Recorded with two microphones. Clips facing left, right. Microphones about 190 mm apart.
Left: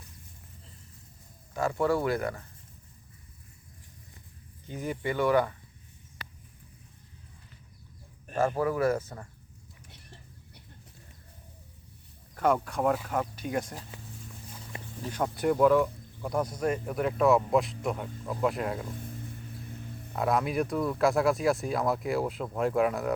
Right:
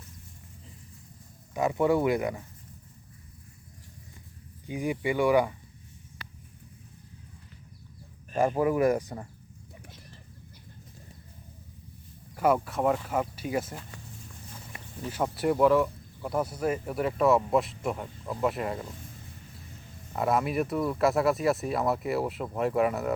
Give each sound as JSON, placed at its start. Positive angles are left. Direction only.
{"t": 1.5, "sound": "speech", "side_deg": -15}
{"t": 4.6, "sound": "speech", "side_deg": -15}
{"t": 8.4, "sound": "speech", "side_deg": -15}
{"t": 12.4, "sound": "speech", "side_deg": -10}
{"t": 15.1, "sound": "speech", "side_deg": -5}
{"t": 20.1, "sound": "speech", "side_deg": 0}